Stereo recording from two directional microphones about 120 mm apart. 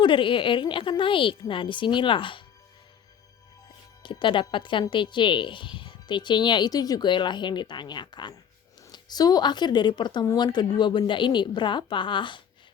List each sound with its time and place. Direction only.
0.0 s a woman's voice: 45° left (ahead or behind)
4.0 s speech: 45° left (ahead or behind)